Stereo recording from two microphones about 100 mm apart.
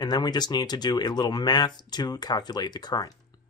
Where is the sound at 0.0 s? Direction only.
45° left (ahead or behind).